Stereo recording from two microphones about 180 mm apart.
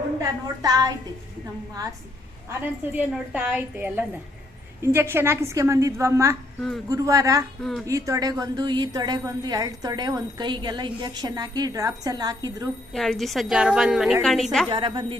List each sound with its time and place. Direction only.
0.6 s a woman's voice: 20° right (ahead or behind)
2.5 s a woman's voice: 10° right (ahead or behind)
6.6 s a woman's voice: centre (ahead or behind)
6.8 s a woman's voice: 20° right (ahead or behind)
7.6 s a woman's voice: centre (ahead or behind)
7.9 s a woman's voice: 15° right (ahead or behind)
12.9 s a woman's voice: centre (ahead or behind)
14.7 s a woman's voice: 25° right (ahead or behind)